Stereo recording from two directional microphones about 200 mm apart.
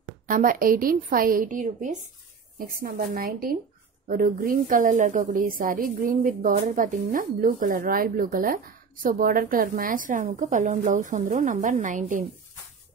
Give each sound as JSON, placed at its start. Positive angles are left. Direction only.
{"t": 0.3, "sound": "a woman's voice", "side_deg": -45}